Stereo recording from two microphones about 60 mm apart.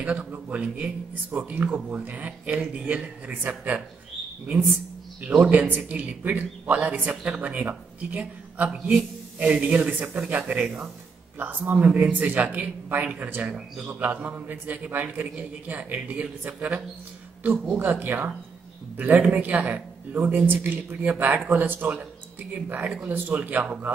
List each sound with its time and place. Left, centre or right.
0.0 s a man's voice: right
5.3 s a man's voice: right
17.5 s a man's voice: right